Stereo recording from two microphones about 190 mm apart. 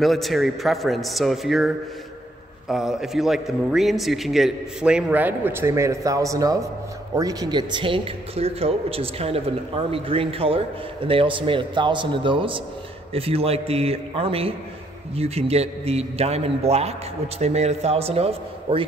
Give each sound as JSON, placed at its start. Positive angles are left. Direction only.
{"t": 0.0, "sound": "a man's voice", "side_deg": 0}
{"t": 2.7, "sound": "a man's voice", "side_deg": 0}